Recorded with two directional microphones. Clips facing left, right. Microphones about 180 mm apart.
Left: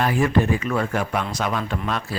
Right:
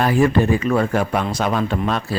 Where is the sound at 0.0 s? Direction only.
35° right (ahead or behind).